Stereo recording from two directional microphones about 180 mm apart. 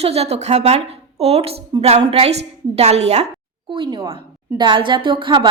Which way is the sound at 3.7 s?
25° right (ahead or behind).